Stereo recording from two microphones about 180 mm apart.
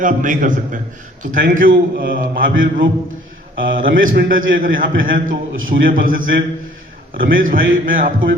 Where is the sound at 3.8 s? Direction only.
50° right (ahead or behind).